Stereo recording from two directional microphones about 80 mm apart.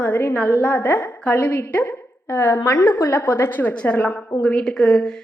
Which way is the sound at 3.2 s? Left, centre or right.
Left.